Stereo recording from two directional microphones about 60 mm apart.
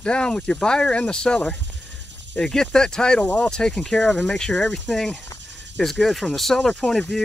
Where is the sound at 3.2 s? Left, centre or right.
Left.